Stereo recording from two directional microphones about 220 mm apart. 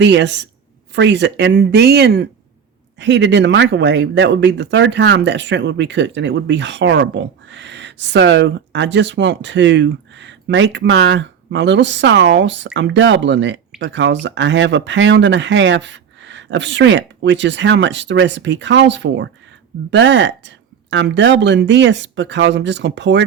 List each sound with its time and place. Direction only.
0.0 s speech: 50° right (ahead or behind)